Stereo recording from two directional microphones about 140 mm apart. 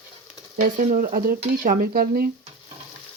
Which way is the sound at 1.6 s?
75° right (ahead or behind).